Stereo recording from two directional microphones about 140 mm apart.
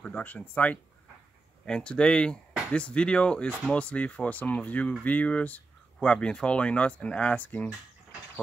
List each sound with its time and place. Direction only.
0.0 s speech: 10° left (ahead or behind)